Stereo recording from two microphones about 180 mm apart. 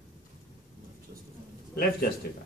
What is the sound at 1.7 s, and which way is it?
Speech, 60° left (ahead or behind).